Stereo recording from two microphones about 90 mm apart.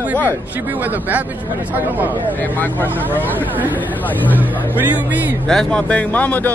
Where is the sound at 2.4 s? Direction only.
20° left (ahead or behind).